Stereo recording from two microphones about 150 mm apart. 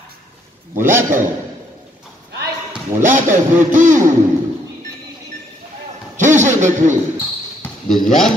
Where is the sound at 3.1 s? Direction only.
60° right (ahead or behind).